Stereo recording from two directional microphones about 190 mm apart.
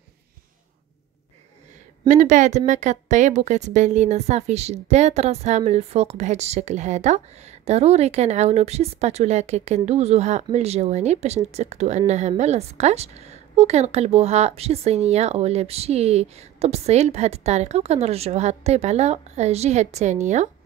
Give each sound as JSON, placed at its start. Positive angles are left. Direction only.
{"t": 2.0, "sound": "a woman's voice", "side_deg": -40}